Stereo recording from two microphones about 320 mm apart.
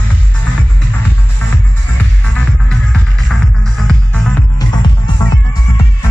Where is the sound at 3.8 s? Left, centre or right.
Centre.